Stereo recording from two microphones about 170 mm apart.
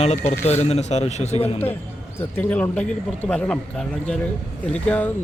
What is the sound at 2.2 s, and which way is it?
Speech, 10° left (ahead or behind).